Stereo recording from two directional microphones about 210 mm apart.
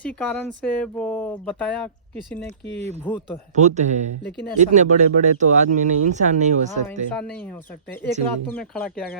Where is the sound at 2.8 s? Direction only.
30° right (ahead or behind).